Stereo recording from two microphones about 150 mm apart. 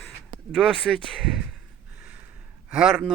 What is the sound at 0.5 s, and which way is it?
Speech, centre (ahead or behind).